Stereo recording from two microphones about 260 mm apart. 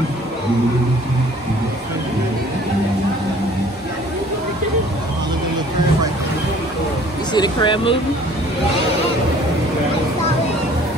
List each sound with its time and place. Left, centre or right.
7.3 s speech: centre